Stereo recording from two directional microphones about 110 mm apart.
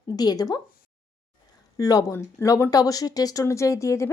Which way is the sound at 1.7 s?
30° left (ahead or behind).